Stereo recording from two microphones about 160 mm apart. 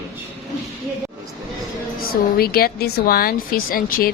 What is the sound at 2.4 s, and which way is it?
A woman's voice, 70° left (ahead or behind).